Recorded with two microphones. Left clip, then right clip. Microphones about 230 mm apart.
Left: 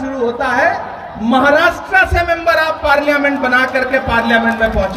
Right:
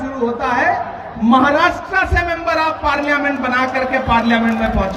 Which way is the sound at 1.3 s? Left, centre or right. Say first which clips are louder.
Left 2 dB; left.